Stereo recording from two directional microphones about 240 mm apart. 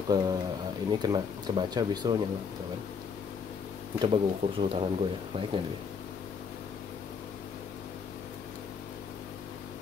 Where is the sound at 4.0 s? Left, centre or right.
Right.